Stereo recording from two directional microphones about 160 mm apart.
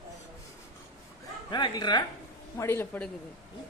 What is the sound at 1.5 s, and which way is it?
Speech, 25° left (ahead or behind).